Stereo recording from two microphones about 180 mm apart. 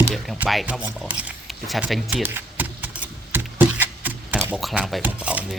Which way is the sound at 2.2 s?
10° right (ahead or behind).